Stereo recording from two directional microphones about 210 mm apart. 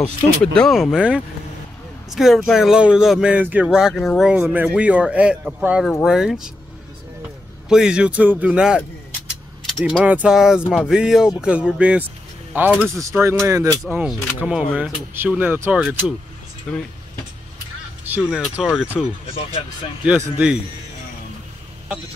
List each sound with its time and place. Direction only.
0.6 s speech: centre (ahead or behind)
7.6 s speech: 5° right (ahead or behind)
13.9 s speech: 5° right (ahead or behind)
16.7 s speech: 5° left (ahead or behind)
18.1 s speech: 5° right (ahead or behind)